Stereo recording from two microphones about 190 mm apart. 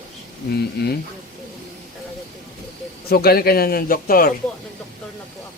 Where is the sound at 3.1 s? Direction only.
55° left (ahead or behind).